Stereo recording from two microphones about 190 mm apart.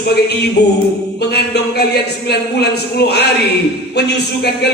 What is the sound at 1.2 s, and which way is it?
A man's voice, 60° left (ahead or behind).